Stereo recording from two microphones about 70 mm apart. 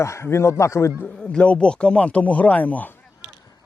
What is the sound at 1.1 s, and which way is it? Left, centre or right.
Speech, centre.